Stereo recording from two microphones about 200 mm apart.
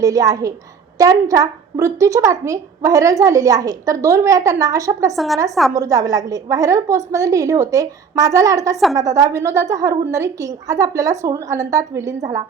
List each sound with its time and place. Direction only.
0.0 s a woman's voice: 15° right (ahead or behind)
5.1 s a woman's voice: centre (ahead or behind)
5.7 s a woman's voice: 15° right (ahead or behind)